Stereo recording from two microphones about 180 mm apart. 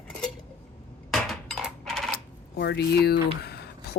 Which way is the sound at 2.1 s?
65° left (ahead or behind).